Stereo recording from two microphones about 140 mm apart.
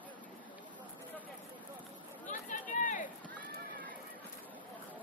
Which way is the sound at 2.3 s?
65° left (ahead or behind).